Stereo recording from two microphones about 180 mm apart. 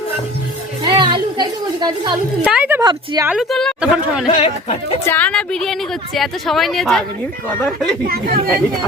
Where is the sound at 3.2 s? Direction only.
Centre (ahead or behind).